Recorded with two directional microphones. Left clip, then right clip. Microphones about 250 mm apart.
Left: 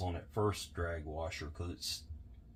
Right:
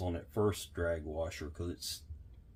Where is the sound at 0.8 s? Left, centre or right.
Right.